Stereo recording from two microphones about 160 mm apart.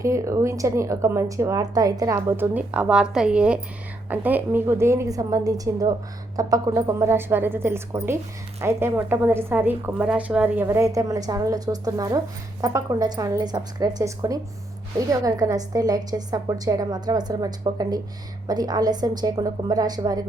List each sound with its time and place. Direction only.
0.0 s a woman's voice: 20° right (ahead or behind)